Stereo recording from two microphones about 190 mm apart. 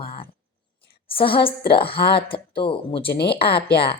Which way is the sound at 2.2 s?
30° left (ahead or behind).